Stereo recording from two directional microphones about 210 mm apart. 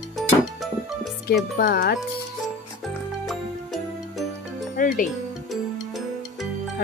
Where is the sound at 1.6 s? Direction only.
45° left (ahead or behind).